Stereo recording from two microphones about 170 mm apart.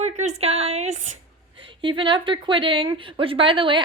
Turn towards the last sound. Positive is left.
turn(degrees=-30)  # may be behind; listen again after turning